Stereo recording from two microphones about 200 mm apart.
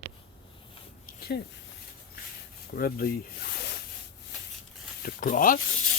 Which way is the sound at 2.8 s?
50° left (ahead or behind).